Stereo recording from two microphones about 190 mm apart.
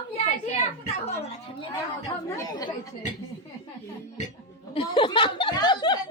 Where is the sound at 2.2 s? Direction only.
20° left (ahead or behind).